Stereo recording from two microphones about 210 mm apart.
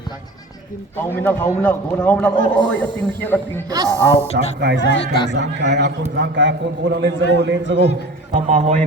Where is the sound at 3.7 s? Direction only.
15° right (ahead or behind).